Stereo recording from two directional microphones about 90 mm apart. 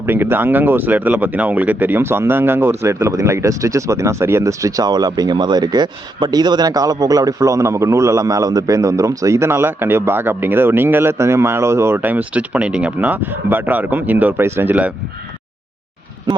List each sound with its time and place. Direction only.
0.0 s speech: 25° right (ahead or behind)